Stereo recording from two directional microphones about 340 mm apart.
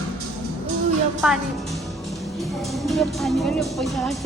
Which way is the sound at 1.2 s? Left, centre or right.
Centre.